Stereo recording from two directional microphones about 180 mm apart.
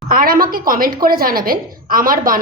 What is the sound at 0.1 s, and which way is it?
A woman's voice, 55° right (ahead or behind).